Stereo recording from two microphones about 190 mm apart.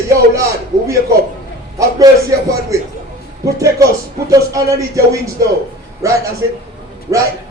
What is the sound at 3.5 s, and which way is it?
A man's voice, 15° right (ahead or behind).